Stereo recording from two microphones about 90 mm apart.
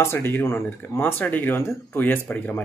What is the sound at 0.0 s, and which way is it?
A man's voice, 25° left (ahead or behind).